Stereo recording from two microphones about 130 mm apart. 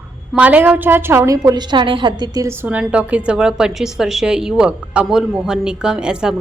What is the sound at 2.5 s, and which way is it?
A woman's voice, 15° right (ahead or behind).